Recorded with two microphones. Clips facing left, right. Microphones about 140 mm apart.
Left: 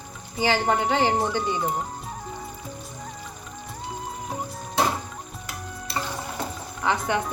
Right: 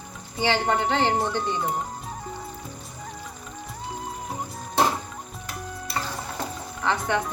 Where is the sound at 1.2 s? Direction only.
Centre (ahead or behind).